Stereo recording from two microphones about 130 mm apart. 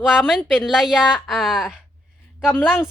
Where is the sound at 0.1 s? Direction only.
5° right (ahead or behind).